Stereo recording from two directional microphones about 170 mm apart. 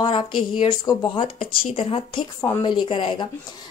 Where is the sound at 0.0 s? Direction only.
30° left (ahead or behind).